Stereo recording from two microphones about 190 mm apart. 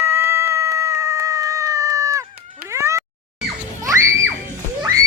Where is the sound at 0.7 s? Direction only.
15° right (ahead or behind).